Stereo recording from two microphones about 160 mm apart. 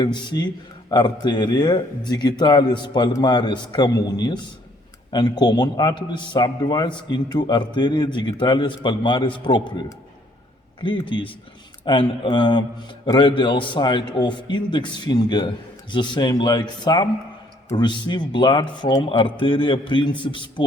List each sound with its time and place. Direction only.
0.0 s a man's voice: 25° left (ahead or behind)